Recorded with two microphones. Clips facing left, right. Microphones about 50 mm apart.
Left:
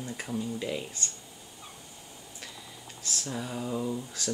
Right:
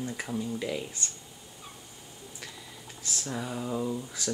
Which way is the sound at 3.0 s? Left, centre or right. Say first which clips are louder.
Right 1 dB; centre.